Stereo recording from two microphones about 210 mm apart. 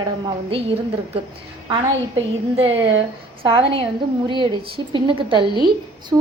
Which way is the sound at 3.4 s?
20° right (ahead or behind).